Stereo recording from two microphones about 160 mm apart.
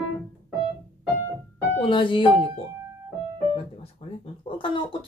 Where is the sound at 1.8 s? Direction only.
30° left (ahead or behind).